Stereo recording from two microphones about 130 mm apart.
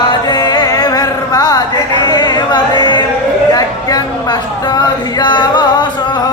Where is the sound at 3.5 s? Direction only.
30° left (ahead or behind).